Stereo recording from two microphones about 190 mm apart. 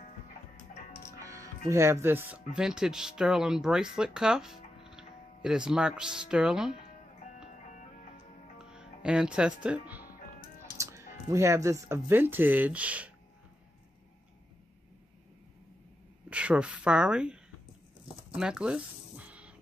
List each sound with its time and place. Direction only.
1.2 s music: 15° right (ahead or behind)
1.7 s speech: 15° right (ahead or behind)
4.8 s music: 5° right (ahead or behind)
5.7 s speech: 5° right (ahead or behind)
8.6 s speech: 5° right (ahead or behind)
16.3 s speech: 5° right (ahead or behind)
18.3 s a sound: 5° right (ahead or behind)